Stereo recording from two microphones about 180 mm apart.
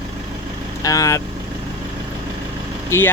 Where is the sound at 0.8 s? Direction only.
20° left (ahead or behind).